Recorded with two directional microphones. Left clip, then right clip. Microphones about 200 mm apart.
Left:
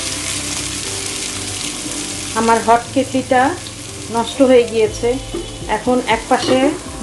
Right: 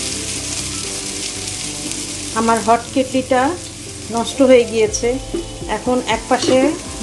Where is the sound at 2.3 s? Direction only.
15° right (ahead or behind).